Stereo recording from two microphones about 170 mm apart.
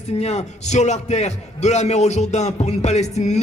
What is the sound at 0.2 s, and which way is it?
A man's voice, 40° left (ahead or behind).